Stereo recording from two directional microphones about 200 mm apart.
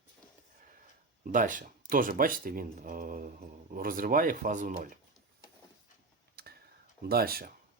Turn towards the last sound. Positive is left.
turn(degrees=-50)  # may be behind; listen again after turning